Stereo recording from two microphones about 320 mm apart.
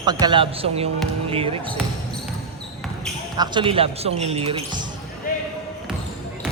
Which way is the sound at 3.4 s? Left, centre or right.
Centre.